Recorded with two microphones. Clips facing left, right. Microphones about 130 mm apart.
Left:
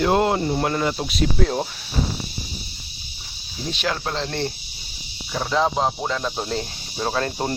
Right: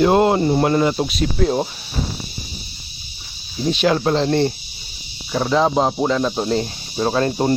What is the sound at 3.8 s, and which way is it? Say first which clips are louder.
Speech: right 9 dB; 15° right (ahead or behind).